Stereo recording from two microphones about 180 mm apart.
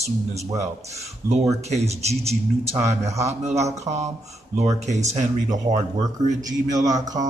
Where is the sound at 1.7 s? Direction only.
35° right (ahead or behind).